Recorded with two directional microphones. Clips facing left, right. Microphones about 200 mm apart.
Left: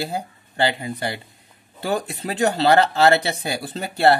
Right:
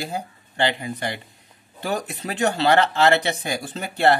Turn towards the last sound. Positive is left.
turn(degrees=35)  # may be behind; listen again after turning